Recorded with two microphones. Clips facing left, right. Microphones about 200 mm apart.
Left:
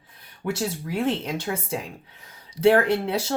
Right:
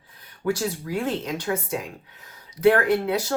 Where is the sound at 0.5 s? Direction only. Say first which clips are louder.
Left 2 dB; 25° left (ahead or behind).